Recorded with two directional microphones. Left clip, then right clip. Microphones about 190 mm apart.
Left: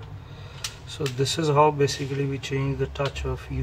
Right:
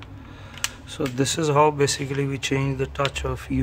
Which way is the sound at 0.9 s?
55° right (ahead or behind).